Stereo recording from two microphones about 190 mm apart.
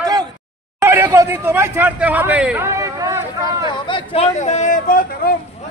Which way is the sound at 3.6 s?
25° left (ahead or behind).